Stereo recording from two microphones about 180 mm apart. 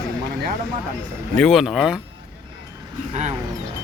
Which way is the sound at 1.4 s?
Centre (ahead or behind).